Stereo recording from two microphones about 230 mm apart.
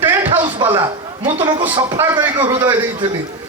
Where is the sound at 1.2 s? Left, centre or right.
Right.